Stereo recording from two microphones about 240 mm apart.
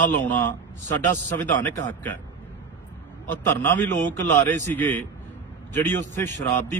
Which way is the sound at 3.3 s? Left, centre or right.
Centre.